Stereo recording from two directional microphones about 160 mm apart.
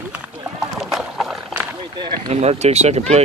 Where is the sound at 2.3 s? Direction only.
45° right (ahead or behind).